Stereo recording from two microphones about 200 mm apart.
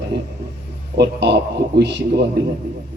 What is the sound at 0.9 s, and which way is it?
A man's voice, 60° right (ahead or behind).